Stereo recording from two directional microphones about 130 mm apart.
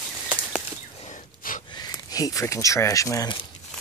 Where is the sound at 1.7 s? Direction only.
30° left (ahead or behind).